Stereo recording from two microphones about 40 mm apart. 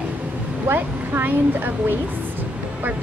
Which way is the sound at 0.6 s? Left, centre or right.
Right.